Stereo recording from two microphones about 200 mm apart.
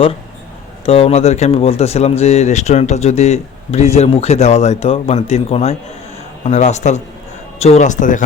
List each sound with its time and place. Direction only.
0.9 s speech: 30° left (ahead or behind)